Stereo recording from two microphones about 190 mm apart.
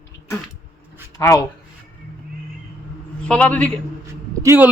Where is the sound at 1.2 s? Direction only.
15° left (ahead or behind).